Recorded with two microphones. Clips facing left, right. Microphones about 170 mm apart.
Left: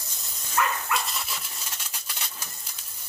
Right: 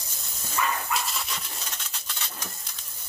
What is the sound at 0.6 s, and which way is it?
Dog, 70° left (ahead or behind).